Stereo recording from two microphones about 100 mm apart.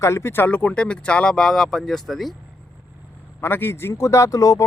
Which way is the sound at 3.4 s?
20° left (ahead or behind).